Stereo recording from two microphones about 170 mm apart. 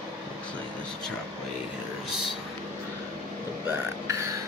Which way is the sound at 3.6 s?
15° right (ahead or behind).